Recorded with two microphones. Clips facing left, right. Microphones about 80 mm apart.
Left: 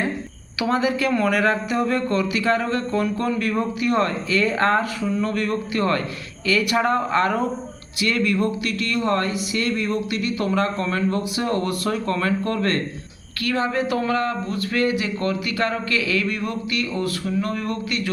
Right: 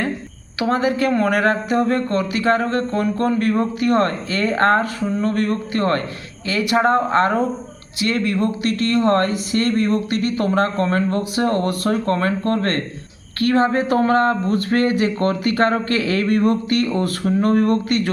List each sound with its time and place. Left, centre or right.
0.6 s speech: right
6.4 s speech: right